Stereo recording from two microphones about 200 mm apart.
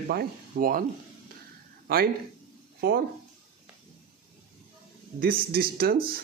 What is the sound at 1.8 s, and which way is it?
Speech, 50° right (ahead or behind).